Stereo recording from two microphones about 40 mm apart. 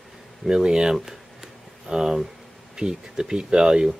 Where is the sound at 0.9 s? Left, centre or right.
Centre.